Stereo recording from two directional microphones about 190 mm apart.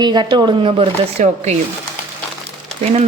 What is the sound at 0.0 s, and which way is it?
Speech, 20° right (ahead or behind).